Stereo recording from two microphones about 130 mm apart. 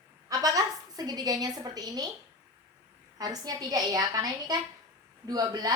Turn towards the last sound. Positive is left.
turn(degrees=-30)  # may be behind; listen again after turning